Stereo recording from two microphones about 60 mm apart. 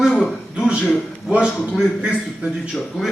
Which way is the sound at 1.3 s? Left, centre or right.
Centre.